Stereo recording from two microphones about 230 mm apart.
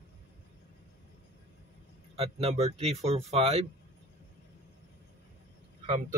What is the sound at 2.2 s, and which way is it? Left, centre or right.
Speech, right.